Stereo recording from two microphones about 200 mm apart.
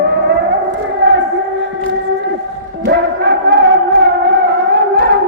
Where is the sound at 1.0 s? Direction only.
60° right (ahead or behind).